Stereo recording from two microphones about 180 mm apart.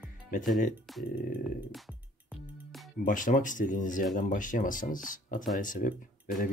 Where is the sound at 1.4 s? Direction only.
Centre (ahead or behind).